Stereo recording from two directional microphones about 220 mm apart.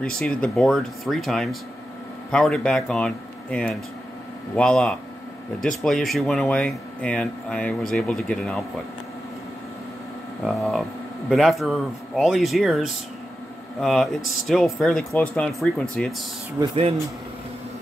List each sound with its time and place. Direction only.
0.2 s speech: 5° left (ahead or behind)
10.4 s speech: centre (ahead or behind)
16.6 s speech: 15° right (ahead or behind)